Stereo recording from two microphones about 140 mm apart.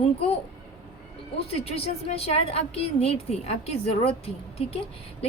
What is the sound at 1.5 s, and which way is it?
A woman's voice, 45° left (ahead or behind).